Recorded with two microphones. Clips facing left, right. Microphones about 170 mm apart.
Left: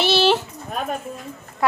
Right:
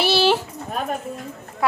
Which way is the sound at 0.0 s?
10° right (ahead or behind).